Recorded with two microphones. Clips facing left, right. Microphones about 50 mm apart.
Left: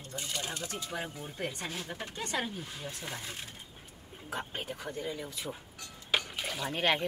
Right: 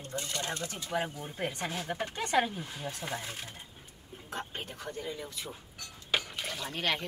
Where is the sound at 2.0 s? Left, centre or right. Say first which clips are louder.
Right 7 dB; right.